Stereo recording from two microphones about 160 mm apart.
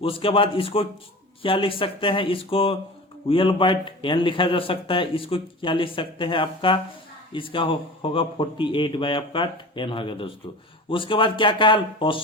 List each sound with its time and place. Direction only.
0.0 s a man's voice: 35° left (ahead or behind)